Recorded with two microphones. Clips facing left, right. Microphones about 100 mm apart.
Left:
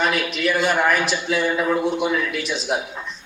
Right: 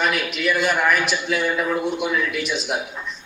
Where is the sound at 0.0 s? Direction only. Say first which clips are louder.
Left 1 dB; 35° left (ahead or behind).